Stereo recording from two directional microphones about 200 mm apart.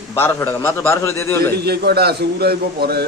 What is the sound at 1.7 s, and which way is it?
A man's voice, 55° right (ahead or behind).